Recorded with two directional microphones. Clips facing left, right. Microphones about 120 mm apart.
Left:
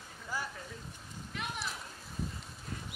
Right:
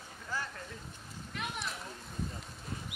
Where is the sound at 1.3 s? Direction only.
Centre (ahead or behind).